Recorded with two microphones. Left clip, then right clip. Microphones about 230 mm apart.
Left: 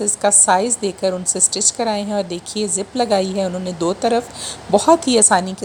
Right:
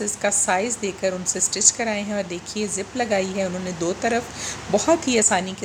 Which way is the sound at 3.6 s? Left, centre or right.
Centre.